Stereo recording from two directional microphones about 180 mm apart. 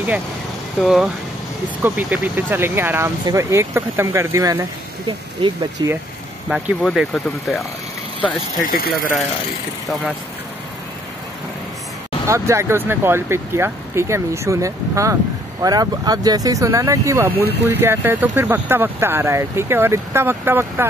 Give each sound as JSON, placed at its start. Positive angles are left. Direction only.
{"t": 0.7, "sound": "speech", "side_deg": 0}
{"t": 6.5, "sound": "speech", "side_deg": 0}
{"t": 8.6, "sound": "speech", "side_deg": 55}
{"t": 12.3, "sound": "speech", "side_deg": -15}